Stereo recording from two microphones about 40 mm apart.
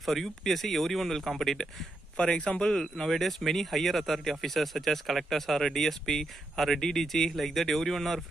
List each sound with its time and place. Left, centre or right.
0.0 s speech: centre
2.1 s speech: left
3.1 s speech: centre